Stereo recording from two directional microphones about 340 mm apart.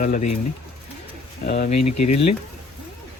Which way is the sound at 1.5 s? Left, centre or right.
Left.